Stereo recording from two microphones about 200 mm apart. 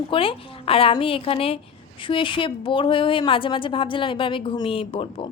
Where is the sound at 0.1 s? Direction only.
25° left (ahead or behind).